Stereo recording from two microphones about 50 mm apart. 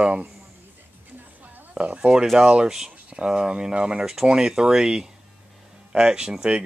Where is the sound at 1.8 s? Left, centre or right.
Centre.